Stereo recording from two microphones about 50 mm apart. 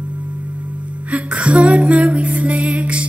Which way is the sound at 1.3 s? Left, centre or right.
Right.